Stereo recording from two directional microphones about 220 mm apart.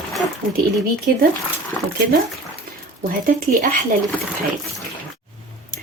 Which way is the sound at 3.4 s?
35° right (ahead or behind).